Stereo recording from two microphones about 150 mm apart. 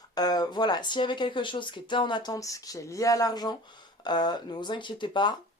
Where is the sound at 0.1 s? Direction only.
25° left (ahead or behind).